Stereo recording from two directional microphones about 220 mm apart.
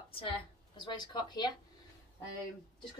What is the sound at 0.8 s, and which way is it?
Speech, 20° left (ahead or behind).